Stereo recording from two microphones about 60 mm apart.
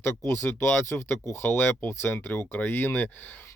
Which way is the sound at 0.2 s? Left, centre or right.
Left.